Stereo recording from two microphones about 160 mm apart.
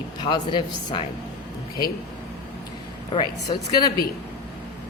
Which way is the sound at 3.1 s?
25° left (ahead or behind).